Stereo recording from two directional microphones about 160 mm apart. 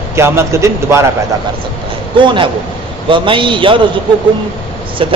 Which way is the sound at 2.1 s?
30° right (ahead or behind).